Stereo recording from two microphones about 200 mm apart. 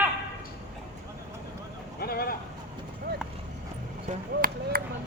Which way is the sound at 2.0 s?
50° left (ahead or behind).